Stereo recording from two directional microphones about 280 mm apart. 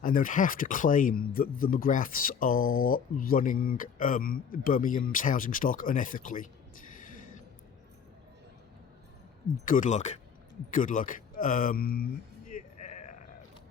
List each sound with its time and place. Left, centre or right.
0.0 s speech: left
2.6 s speech: left
2.9 s speech: left
9.6 s speech: left
12.5 s sheep: left